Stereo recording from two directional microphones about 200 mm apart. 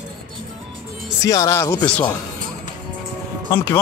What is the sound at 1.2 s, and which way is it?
Speech, 15° left (ahead or behind).